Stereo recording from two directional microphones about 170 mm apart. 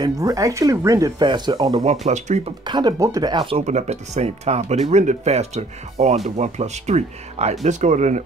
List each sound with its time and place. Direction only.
0.0 s speech: 20° right (ahead or behind)
1.9 s speech: 40° right (ahead or behind)
2.6 s speech: 25° right (ahead or behind)
3.5 s speech: 45° right (ahead or behind)